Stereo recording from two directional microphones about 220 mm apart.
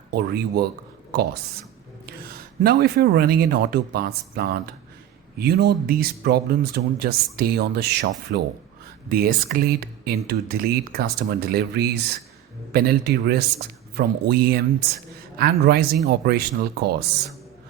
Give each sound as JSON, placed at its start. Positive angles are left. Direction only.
{"t": 0.1, "sound": "speech", "side_deg": -45}
{"t": 2.6, "sound": "speech", "side_deg": -45}